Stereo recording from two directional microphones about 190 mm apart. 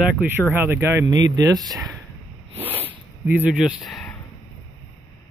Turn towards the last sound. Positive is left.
turn(degrees=0)  # may be behind; listen again after turning